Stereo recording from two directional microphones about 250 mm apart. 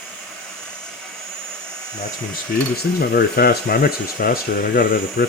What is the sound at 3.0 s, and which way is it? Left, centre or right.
Speech, left.